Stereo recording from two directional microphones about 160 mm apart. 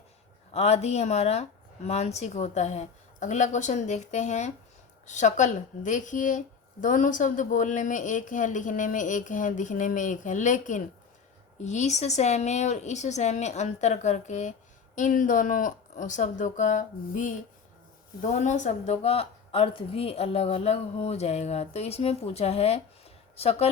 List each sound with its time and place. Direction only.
0.5 s speech: 40° left (ahead or behind)